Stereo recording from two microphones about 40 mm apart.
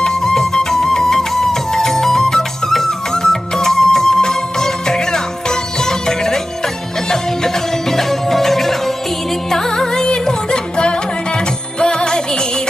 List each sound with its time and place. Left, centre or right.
0.0 s music: centre